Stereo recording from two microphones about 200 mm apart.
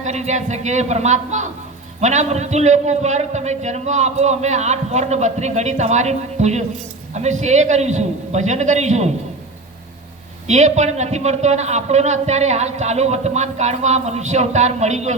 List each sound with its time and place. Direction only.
0.0 s a man's voice: 35° right (ahead or behind)
10.4 s a man's voice: 35° right (ahead or behind)